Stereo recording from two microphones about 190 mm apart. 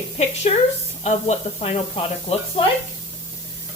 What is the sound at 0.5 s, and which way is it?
Speech, 35° left (ahead or behind).